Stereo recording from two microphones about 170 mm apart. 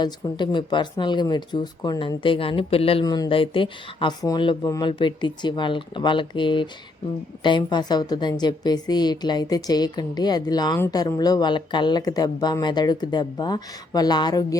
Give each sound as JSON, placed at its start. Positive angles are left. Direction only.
{"t": 0.0, "sound": "a woman's voice", "side_deg": 25}